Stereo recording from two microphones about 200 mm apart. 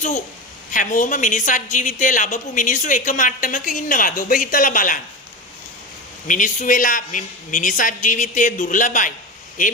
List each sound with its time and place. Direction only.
0.7 s a woman's voice: 40° left (ahead or behind)
6.2 s a woman's voice: 40° left (ahead or behind)